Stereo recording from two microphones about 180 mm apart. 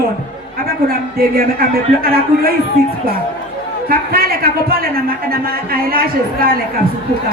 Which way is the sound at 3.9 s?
55° right (ahead or behind).